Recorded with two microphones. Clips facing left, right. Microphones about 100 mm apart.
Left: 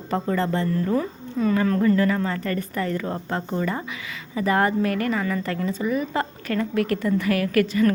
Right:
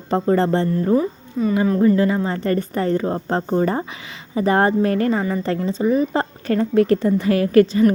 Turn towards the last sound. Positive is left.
turn(degrees=-25)  # may be behind; listen again after turning